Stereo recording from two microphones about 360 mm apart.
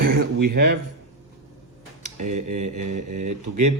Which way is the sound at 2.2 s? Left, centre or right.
Centre.